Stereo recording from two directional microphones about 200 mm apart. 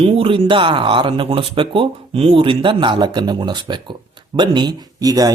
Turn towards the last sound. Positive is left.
turn(degrees=-20)  # may be behind; listen again after turning